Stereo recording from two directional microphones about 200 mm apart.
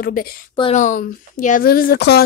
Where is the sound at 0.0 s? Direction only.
50° left (ahead or behind).